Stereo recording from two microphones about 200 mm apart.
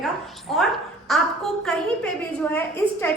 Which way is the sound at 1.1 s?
Centre (ahead or behind).